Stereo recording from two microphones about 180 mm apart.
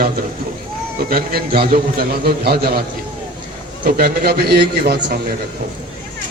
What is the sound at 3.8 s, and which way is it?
A man's voice, 55° right (ahead or behind).